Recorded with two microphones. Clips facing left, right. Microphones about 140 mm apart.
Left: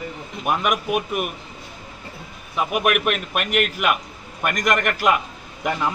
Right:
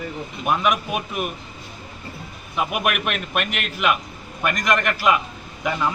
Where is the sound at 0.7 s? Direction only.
5° left (ahead or behind).